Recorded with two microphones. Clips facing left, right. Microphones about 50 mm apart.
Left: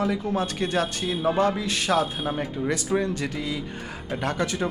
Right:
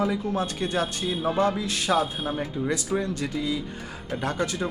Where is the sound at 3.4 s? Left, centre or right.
Left.